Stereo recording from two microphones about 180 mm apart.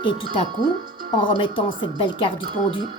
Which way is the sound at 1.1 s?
25° left (ahead or behind).